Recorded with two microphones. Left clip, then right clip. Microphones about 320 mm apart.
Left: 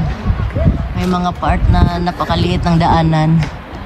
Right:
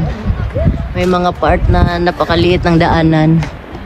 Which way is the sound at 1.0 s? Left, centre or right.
Centre.